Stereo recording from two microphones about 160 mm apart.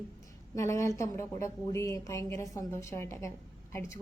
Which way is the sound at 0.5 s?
15° left (ahead or behind).